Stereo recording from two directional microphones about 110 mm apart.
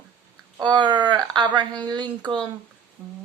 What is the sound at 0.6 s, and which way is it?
A woman's voice, 45° right (ahead or behind).